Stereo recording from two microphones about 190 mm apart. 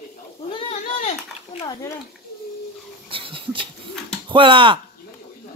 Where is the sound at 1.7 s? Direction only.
15° left (ahead or behind).